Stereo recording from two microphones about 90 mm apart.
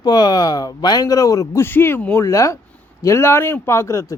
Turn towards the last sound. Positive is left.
turn(degrees=35)  # may be behind; listen again after turning